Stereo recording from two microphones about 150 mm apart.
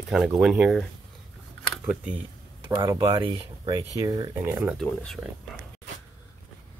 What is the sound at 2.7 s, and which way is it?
Speech, 25° right (ahead or behind).